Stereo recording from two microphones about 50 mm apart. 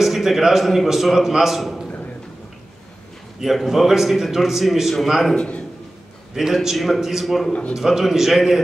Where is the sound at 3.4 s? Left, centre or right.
Centre.